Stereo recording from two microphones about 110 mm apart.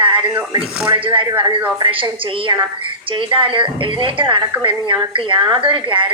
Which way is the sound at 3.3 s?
50° right (ahead or behind).